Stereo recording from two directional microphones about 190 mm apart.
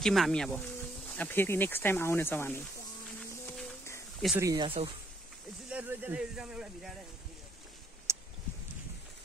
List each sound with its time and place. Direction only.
0.0 s speech: centre (ahead or behind)
4.4 s speech: 15° right (ahead or behind)
4.6 s speech: 30° right (ahead or behind)
5.7 s speech: 10° right (ahead or behind)
8.1 s a sound: 15° right (ahead or behind)